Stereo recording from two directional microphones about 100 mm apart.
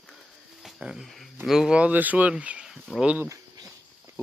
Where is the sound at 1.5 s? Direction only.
5° right (ahead or behind).